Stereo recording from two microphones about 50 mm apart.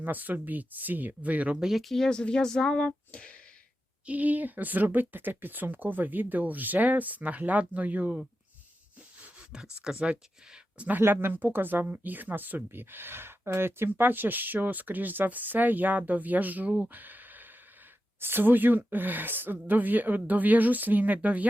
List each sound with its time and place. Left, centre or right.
0.0 s speech: right
1.5 s speech: centre
1.8 s speech: centre
2.0 s speech: centre
2.7 s speech: left
4.0 s speech: right
9.5 s speech: centre
11.0 s speech: right
16.9 s a sound: right
18.2 s speech: right